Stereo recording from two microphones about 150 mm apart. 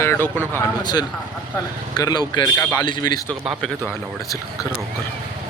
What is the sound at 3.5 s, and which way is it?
Speech, centre (ahead or behind).